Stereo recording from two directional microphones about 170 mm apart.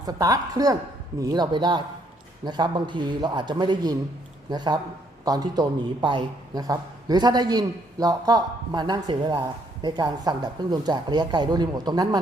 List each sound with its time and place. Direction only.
0.0 s a man's voice: 20° right (ahead or behind)